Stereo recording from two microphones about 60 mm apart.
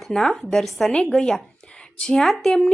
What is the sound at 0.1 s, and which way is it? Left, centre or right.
Speech, centre.